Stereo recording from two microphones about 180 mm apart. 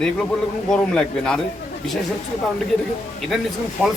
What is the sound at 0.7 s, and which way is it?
Speech, 5° left (ahead or behind).